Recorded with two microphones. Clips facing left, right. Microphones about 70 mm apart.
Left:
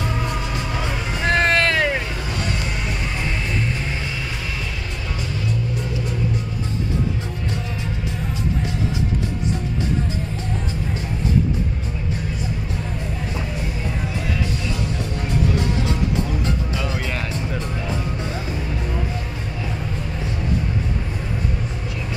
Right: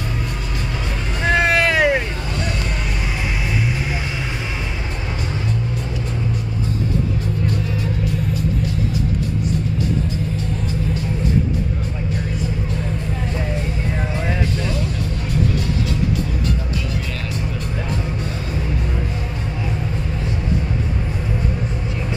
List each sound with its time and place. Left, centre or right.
1.2 s vehicle: centre